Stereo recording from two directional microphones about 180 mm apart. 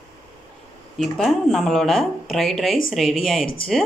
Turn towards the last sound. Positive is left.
turn(degrees=0)  # may be behind; listen again after turning